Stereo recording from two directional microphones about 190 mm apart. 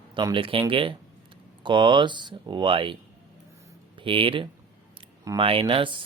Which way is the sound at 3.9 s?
25° right (ahead or behind).